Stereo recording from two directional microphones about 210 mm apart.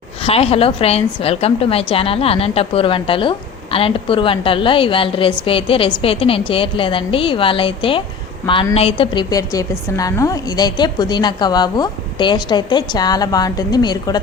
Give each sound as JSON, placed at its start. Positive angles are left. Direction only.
{"t": 0.3, "sound": "a woman's voice", "side_deg": 30}